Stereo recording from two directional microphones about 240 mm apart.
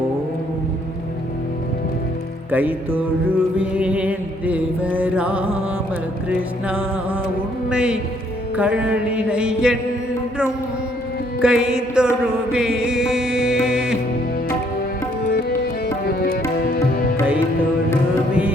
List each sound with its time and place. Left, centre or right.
2.5 s music: centre
6.7 s music: centre
11.3 s music: centre
15.3 s music: left